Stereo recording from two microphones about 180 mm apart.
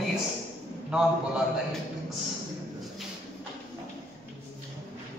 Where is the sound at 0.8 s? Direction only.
5° right (ahead or behind).